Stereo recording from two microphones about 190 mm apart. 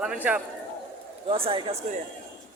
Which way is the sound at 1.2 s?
30° right (ahead or behind).